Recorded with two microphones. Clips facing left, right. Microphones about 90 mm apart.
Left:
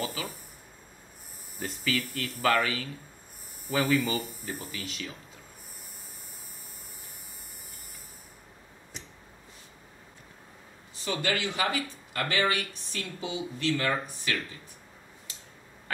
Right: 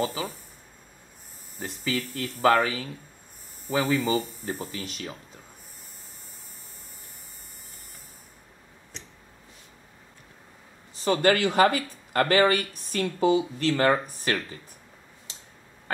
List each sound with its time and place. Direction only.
0.0 s speech: 30° right (ahead or behind)
1.6 s speech: 25° right (ahead or behind)
8.9 s a sound: 10° left (ahead or behind)
11.1 s speech: 45° right (ahead or behind)